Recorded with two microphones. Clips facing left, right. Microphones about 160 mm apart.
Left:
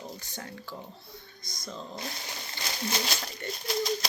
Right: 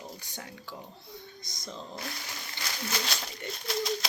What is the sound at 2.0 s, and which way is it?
Speech, 25° left (ahead or behind).